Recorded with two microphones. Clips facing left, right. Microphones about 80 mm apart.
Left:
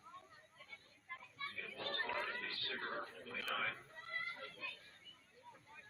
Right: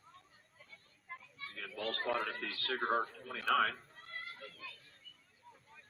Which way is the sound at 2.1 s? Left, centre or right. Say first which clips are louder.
Right 6 dB; right.